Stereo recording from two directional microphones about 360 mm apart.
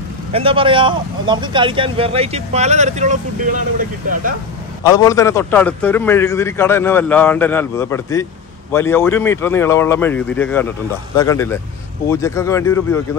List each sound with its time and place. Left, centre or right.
0.3 s speech: centre
4.8 s a man's voice: centre